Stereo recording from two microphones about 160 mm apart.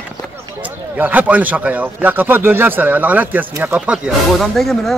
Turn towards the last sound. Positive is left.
turn(degrees=0)  # may be behind; listen again after turning